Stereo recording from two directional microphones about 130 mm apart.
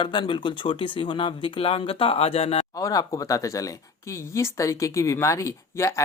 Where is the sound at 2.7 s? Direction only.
25° left (ahead or behind).